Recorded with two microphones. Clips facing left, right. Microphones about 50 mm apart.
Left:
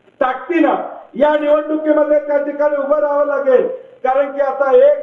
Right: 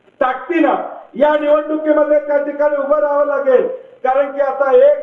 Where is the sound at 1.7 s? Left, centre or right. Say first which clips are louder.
Even; right.